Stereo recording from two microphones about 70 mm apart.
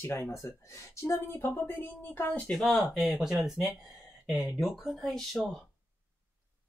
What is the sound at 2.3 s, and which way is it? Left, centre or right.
Speech, centre.